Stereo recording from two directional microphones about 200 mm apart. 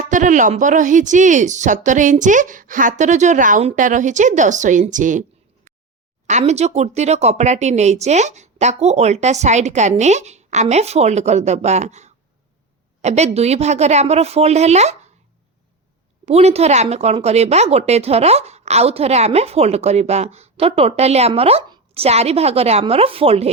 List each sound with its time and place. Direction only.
0.0 s speech: 40° right (ahead or behind)
6.2 s speech: 35° right (ahead or behind)
16.2 s speech: 30° right (ahead or behind)